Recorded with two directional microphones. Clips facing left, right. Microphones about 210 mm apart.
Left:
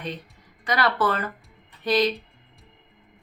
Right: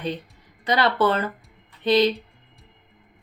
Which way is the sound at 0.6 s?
25° right (ahead or behind).